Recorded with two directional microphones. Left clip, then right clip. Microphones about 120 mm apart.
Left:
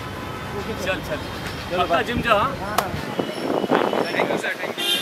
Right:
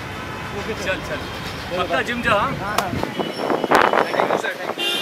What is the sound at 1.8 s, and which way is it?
Speech, 5° right (ahead or behind).